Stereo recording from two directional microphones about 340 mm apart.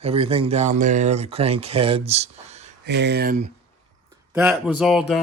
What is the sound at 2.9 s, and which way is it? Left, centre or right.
Speech, right.